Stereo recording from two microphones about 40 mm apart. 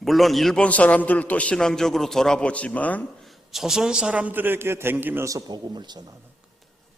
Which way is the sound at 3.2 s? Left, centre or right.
Centre.